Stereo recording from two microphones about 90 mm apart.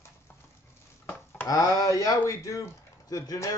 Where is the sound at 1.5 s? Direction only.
35° left (ahead or behind).